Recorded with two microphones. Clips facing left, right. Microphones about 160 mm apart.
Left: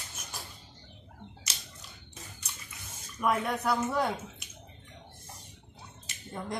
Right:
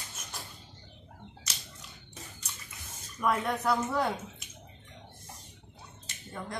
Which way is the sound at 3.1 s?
5° left (ahead or behind).